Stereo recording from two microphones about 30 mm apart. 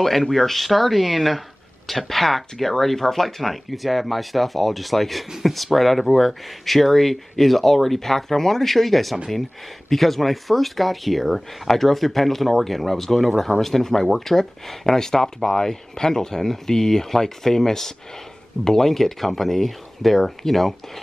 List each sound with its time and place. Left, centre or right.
0.0 s speech: centre
18.9 s speech: centre